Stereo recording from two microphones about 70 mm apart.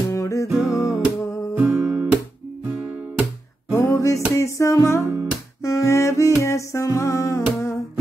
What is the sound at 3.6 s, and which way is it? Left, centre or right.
Music, left.